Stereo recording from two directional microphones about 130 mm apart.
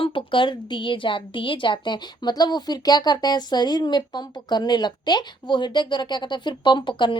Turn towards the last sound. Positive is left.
turn(degrees=35)  # may be behind; listen again after turning